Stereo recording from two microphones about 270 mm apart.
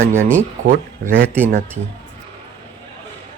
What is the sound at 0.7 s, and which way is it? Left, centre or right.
Speech, right.